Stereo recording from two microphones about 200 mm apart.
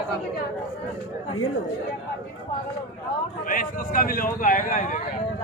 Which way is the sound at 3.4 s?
45° left (ahead or behind).